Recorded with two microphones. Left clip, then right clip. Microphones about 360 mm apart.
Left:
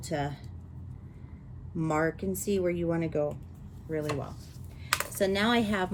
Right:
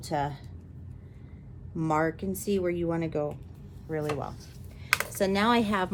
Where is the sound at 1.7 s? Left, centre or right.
Centre.